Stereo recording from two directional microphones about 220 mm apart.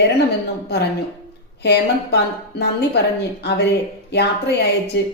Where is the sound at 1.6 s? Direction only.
50° left (ahead or behind).